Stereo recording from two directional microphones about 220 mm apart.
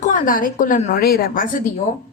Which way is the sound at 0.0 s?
35° left (ahead or behind).